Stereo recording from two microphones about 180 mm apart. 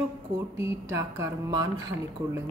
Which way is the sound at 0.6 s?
15° right (ahead or behind).